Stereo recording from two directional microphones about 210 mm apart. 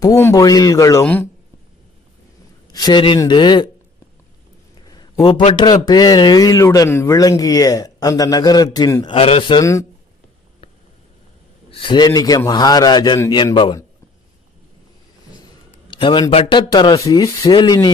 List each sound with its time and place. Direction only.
0.0 s speech: 15° left (ahead or behind)
2.7 s a man's voice: 20° left (ahead or behind)
5.6 s a man's voice: 20° left (ahead or behind)
11.7 s a man's voice: 25° left (ahead or behind)
15.9 s a man's voice: 25° left (ahead or behind)